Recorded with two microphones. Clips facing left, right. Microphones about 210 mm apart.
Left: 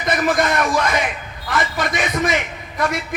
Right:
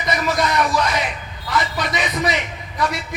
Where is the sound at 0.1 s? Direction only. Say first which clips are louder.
Left 2 dB; 50° left (ahead or behind).